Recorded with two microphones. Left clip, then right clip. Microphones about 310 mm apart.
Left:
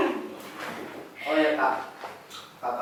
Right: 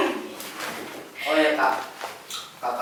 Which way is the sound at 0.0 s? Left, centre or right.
Centre.